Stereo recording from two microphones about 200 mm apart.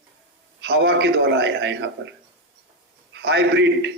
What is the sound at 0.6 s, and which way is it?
A man's voice, 60° right (ahead or behind).